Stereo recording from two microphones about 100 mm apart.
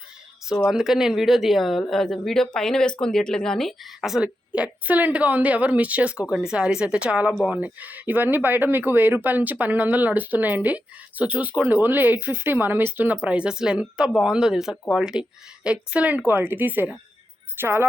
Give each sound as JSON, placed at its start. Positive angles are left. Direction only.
{"t": 0.4, "sound": "speech", "side_deg": -5}